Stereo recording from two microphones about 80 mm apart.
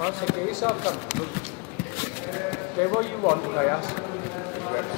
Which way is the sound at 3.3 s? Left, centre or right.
Left.